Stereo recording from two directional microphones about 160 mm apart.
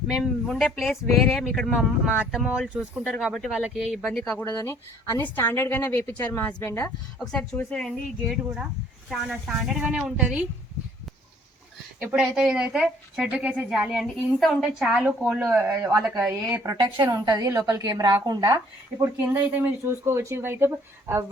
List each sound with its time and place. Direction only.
0.1 s a woman's voice: centre (ahead or behind)
4.4 s a woman's voice: 20° left (ahead or behind)
7.2 s a woman's voice: 5° left (ahead or behind)
11.9 s a woman's voice: 5° right (ahead or behind)
16.5 s a woman's voice: 20° right (ahead or behind)